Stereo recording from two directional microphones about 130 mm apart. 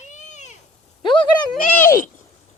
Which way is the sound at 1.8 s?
90° left.